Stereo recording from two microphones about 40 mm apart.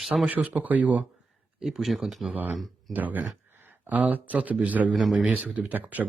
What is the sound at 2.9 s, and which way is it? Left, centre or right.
Speech, right.